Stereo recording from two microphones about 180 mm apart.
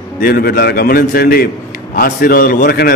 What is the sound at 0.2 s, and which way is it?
A man's voice, 60° left (ahead or behind).